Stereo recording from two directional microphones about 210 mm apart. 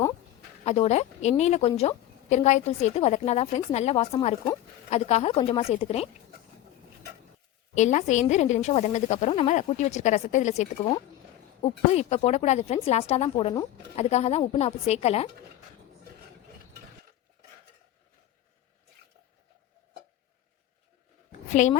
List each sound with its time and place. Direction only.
0.6 s a woman's voice: 30° left (ahead or behind)
7.8 s a woman's voice: 35° left (ahead or behind)
21.5 s a woman's voice: 35° left (ahead or behind)